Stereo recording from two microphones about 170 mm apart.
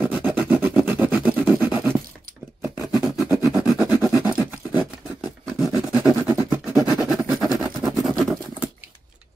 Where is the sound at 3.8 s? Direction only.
15° right (ahead or behind).